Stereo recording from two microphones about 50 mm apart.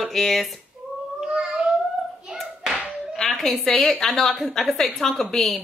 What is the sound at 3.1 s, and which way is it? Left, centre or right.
A woman's voice, centre.